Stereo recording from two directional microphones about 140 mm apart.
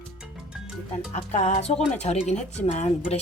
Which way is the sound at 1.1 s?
55° left (ahead or behind).